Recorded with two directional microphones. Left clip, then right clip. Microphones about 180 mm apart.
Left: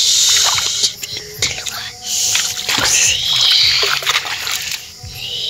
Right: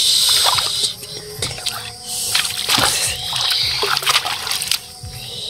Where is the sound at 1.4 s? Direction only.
5° right (ahead or behind).